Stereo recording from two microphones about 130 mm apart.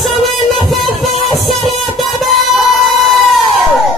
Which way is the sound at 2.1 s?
Centre (ahead or behind).